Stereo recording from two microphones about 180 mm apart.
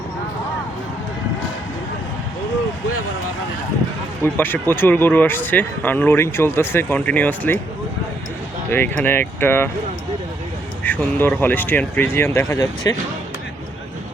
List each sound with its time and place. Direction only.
4.2 s speech: 10° left (ahead or behind)
8.7 s speech: 10° left (ahead or behind)
10.8 s speech: 10° left (ahead or behind)